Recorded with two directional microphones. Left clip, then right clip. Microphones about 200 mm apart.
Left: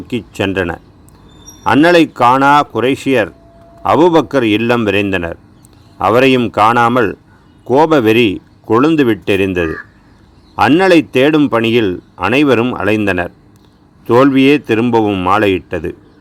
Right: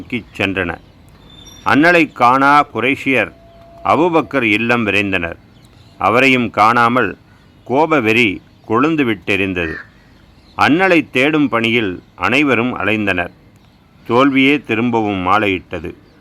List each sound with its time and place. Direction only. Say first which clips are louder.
0.1 s speech: left 2 dB; 20° left (ahead or behind)